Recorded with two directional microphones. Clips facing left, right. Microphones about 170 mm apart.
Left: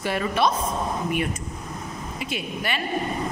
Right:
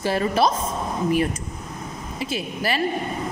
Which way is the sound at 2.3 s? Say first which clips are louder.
Right 4 dB; 35° right (ahead or behind).